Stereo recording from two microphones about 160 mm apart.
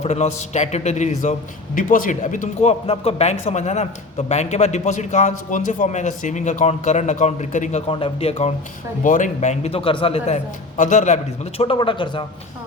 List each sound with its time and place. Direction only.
0.0 s a man's voice: 45° left (ahead or behind)
7.9 s a man's voice: 35° left (ahead or behind)
9.0 s a man's voice: 55° left (ahead or behind); by 12.2 s 30° left (ahead or behind)